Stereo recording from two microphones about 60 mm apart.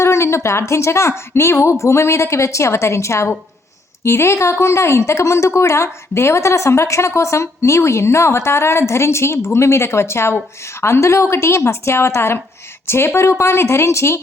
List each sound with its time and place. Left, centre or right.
0.0 s speech: left